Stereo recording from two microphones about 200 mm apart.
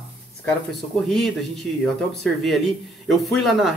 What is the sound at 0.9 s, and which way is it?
Speech, centre (ahead or behind).